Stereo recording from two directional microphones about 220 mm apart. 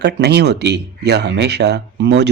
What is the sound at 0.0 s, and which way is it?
Speech, 50° right (ahead or behind).